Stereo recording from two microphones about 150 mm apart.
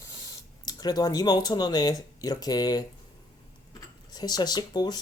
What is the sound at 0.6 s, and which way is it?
Speech, 25° left (ahead or behind).